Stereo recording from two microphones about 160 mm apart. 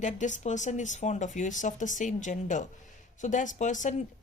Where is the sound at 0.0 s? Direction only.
50° left (ahead or behind).